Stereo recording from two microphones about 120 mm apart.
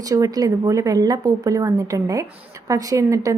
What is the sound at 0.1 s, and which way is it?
A woman's voice, 30° right (ahead or behind).